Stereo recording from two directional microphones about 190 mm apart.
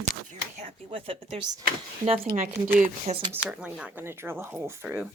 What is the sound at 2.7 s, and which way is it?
Speech, 45° right (ahead or behind).